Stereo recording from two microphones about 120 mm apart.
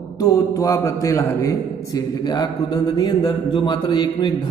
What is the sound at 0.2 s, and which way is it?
A man's voice, 25° left (ahead or behind).